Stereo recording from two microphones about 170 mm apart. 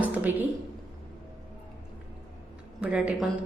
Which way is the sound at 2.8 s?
5° right (ahead or behind).